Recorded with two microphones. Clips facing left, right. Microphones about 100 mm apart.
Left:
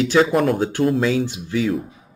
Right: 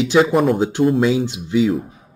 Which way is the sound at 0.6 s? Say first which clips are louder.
Right 3 dB; 20° right (ahead or behind).